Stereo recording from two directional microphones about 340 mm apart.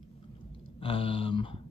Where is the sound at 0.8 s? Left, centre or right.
Centre.